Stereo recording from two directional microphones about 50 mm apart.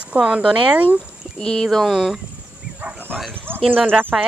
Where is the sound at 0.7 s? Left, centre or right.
Right.